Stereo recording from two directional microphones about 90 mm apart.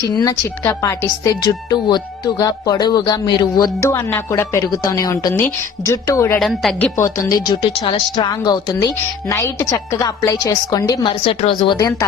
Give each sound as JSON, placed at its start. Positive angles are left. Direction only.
{"t": 0.1, "sound": "a woman's voice", "side_deg": 45}
{"t": 3.8, "sound": "a woman's voice", "side_deg": 30}
{"t": 6.4, "sound": "speech", "side_deg": 0}
{"t": 7.0, "sound": "a woman's voice", "side_deg": 35}
{"t": 9.3, "sound": "a woman's voice", "side_deg": 35}
{"t": 11.0, "sound": "speech", "side_deg": 90}
{"t": 11.8, "sound": "a woman's voice", "side_deg": 40}